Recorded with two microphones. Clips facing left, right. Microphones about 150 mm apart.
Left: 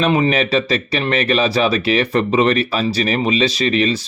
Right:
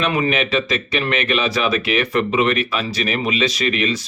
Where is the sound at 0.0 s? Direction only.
30° left (ahead or behind).